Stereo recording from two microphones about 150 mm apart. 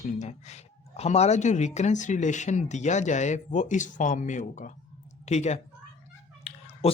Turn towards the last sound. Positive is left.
turn(degrees=40)  # may be behind; listen again after turning